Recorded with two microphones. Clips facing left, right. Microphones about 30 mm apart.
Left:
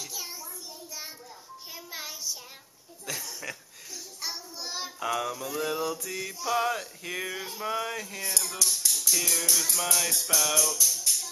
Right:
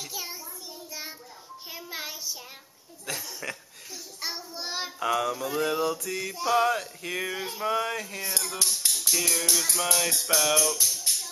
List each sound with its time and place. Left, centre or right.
0.0 s child singing: centre
1.7 s music: centre
3.1 s mantra: centre
4.2 s child singing: right
5.1 s mantra: centre
10.0 s child singing: right
10.6 s music: centre